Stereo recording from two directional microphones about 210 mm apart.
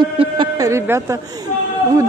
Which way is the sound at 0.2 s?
20° right (ahead or behind).